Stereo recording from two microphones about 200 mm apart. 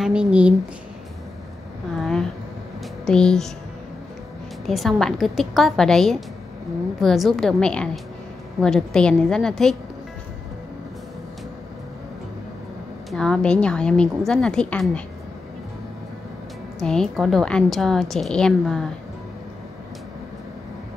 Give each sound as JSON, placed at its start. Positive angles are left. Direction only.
{"t": 0.0, "sound": "a woman's voice", "side_deg": -5}
{"t": 3.1, "sound": "a woman's voice", "side_deg": 5}
{"t": 4.6, "sound": "a woman's voice", "side_deg": 0}
{"t": 13.1, "sound": "a woman's voice", "side_deg": 5}
{"t": 16.8, "sound": "a woman's voice", "side_deg": 5}